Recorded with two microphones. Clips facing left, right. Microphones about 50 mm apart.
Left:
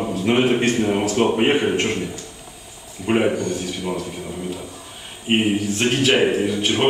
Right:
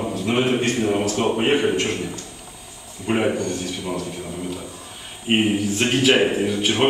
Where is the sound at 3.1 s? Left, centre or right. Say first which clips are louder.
Left 2 dB; centre.